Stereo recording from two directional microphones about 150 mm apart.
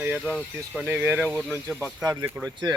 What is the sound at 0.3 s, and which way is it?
Speech, centre (ahead or behind).